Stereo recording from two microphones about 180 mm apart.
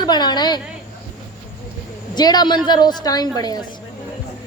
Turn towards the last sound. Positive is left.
turn(degrees=20)  # may be behind; listen again after turning